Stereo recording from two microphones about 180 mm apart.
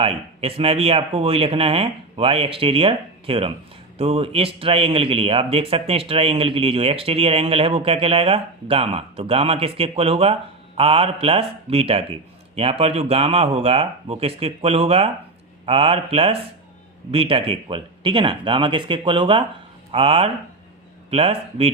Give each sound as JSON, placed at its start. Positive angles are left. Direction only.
{"t": 0.0, "sound": "speech", "side_deg": -30}